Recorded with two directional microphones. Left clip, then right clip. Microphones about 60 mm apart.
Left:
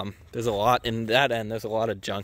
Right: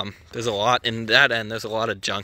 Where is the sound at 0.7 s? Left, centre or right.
Left.